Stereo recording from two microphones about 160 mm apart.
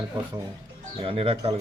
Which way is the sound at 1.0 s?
35° right (ahead or behind).